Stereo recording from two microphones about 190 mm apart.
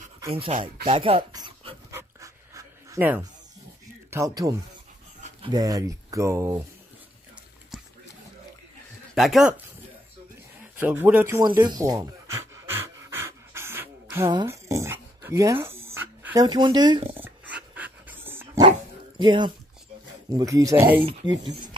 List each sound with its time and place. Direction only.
0.3 s speech: 30° right (ahead or behind)
1.9 s dog: 15° right (ahead or behind)
4.1 s speech: 15° right (ahead or behind)
7.7 s a sound: centre (ahead or behind)
9.1 s speech: centre (ahead or behind)
10.8 s speech: 10° right (ahead or behind)
12.9 s pant: 10° right (ahead or behind)
14.3 s dog: 15° right (ahead or behind)
16.4 s speech: 25° right (ahead or behind)
17.2 s dog: 5° right (ahead or behind)
18.6 s dog: 25° right (ahead or behind)
20.2 s speech: 20° right (ahead or behind)